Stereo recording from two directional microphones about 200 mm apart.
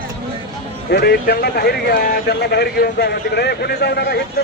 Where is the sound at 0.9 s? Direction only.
55° left (ahead or behind).